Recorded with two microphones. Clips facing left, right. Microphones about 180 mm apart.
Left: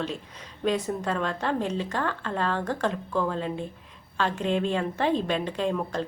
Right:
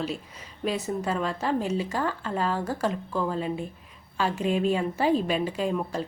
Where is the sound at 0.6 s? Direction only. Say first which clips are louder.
Left 2 dB; 5° right (ahead or behind).